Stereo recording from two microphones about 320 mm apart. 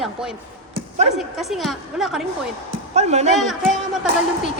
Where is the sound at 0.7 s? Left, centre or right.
Centre.